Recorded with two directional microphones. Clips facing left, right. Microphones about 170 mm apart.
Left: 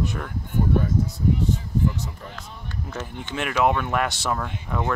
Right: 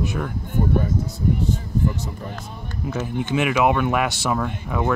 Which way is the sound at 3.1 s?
55° right (ahead or behind).